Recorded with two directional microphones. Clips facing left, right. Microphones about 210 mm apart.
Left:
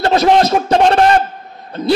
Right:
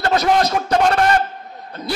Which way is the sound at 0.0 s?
25° left (ahead or behind).